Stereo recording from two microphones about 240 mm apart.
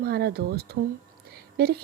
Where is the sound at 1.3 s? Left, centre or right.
Right.